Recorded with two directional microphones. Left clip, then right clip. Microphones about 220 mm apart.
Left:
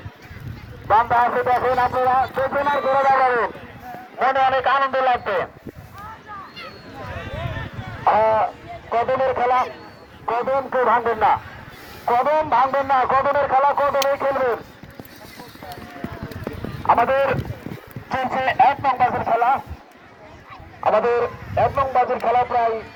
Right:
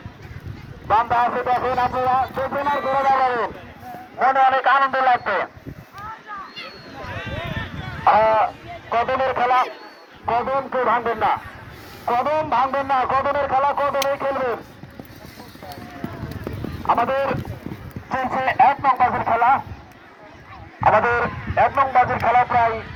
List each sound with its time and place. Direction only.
0.9 s speech: 50° right (ahead or behind)
2.6 s a man's voice: 40° right (ahead or behind)
3.0 s speech: 55° right (ahead or behind)
4.4 s speech: 15° left (ahead or behind)
7.1 s a sound: 5° right (ahead or behind)
8.0 s speech: 15° left (ahead or behind)
10.2 s a man's voice: 35° right (ahead or behind)
16.3 s clip-clop: 50° right (ahead or behind)
18.2 s speech: centre (ahead or behind); by 19.6 s 20° left (ahead or behind)
20.8 s speech: 20° left (ahead or behind)